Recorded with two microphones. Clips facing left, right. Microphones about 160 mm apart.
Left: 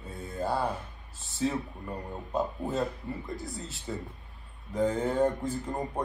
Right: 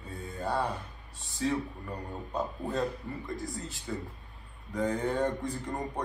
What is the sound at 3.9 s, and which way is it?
Speech, 20° left (ahead or behind).